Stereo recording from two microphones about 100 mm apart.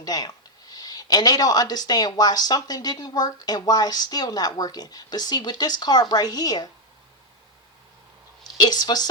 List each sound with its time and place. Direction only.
0.0 s speech: 40° left (ahead or behind)
8.4 s speech: 40° left (ahead or behind)